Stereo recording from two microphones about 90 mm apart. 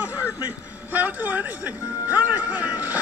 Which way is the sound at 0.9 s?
20° right (ahead or behind).